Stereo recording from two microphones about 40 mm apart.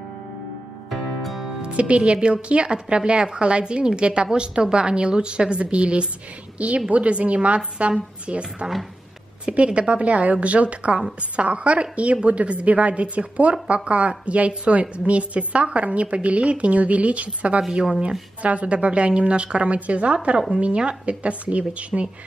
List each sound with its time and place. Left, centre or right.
0.8 s music: centre
1.6 s a woman's voice: right
9.7 s a woman's voice: right